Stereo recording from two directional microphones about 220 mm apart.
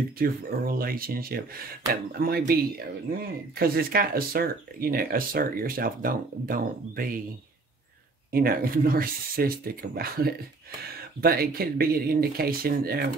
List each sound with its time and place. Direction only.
0.2 s speech: 40° right (ahead or behind)
8.3 s speech: 45° right (ahead or behind)